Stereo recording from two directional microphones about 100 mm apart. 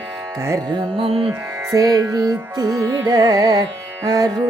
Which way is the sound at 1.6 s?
35° right (ahead or behind).